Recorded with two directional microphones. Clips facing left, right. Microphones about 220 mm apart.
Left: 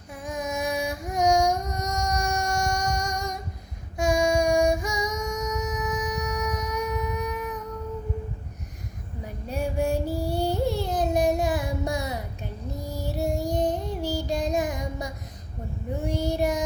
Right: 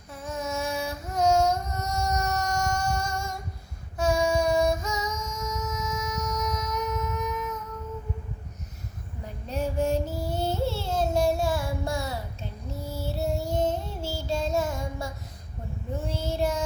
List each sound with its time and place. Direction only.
0.2 s music: 15° left (ahead or behind)
3.9 s child singing: 15° left (ahead or behind)
6.7 s a sound: 15° left (ahead or behind)
9.2 s child singing: 10° left (ahead or behind)